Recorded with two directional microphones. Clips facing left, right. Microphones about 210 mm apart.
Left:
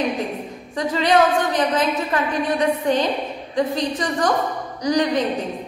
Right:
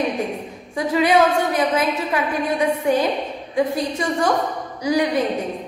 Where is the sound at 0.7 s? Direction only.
10° right (ahead or behind).